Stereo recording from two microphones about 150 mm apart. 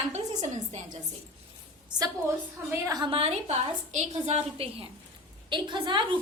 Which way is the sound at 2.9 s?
30° right (ahead or behind).